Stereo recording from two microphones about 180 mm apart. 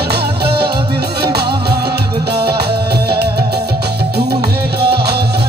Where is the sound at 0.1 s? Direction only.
65° right (ahead or behind).